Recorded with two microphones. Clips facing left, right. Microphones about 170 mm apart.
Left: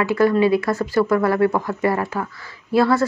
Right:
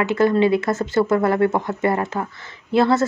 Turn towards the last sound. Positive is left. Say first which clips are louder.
# even
turn(degrees=-20)  # may be behind; listen again after turning